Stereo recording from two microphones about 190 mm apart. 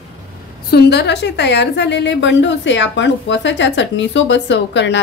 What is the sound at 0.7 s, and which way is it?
A woman's voice, 60° left (ahead or behind).